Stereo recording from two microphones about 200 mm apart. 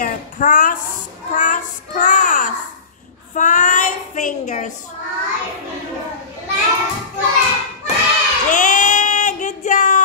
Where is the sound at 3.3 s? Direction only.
40° left (ahead or behind).